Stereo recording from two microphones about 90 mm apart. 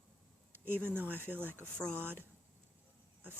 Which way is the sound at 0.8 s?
25° right (ahead or behind).